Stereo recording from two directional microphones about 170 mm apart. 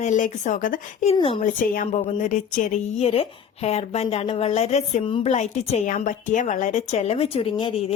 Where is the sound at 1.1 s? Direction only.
30° left (ahead or behind).